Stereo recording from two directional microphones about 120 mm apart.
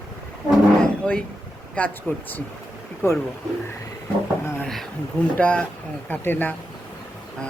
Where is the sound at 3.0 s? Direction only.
20° left (ahead or behind).